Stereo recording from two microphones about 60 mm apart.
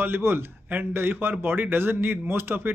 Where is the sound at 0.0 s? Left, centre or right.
Right.